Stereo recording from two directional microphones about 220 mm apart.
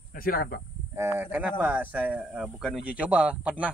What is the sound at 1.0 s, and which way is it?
Speech, 10° right (ahead or behind).